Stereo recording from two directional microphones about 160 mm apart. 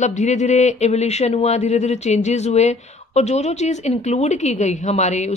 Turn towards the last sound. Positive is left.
turn(degrees=45)  # may be behind; listen again after turning